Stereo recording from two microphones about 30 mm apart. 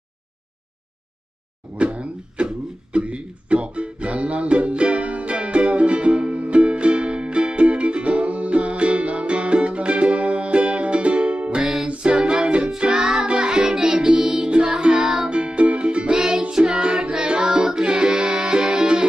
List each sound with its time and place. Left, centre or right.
1.8 s a sound: right
3.0 s music: right
16.2 s music: right